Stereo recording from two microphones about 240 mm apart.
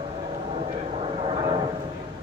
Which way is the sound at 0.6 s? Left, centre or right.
Right.